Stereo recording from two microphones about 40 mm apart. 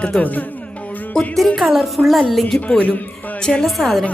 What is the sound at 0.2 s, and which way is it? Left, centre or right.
Music, left.